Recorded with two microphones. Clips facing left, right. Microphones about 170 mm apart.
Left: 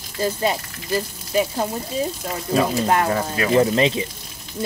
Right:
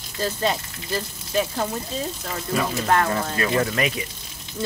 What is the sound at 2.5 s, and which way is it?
Speech, 25° left (ahead or behind).